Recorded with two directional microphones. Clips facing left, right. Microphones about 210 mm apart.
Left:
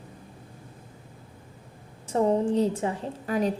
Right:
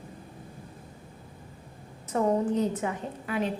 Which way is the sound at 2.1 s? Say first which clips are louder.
Left 2 dB; 30° left (ahead or behind).